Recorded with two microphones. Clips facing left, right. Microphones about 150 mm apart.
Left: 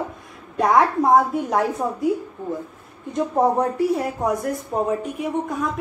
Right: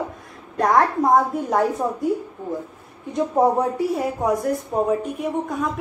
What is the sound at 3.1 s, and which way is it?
A woman's voice, 5° right (ahead or behind).